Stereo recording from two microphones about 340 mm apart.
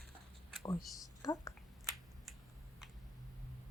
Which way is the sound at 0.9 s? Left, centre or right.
Centre.